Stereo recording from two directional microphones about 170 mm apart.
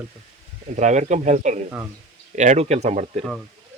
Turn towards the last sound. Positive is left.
turn(degrees=-40)  # may be behind; listen again after turning